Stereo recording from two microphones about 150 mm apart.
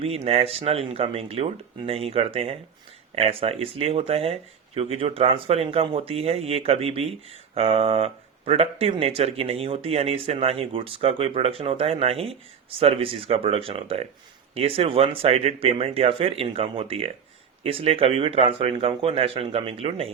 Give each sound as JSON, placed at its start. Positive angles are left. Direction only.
{"t": 0.0, "sound": "speech", "side_deg": -40}